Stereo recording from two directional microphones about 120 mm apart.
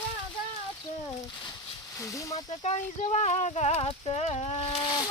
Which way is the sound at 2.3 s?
60° left (ahead or behind).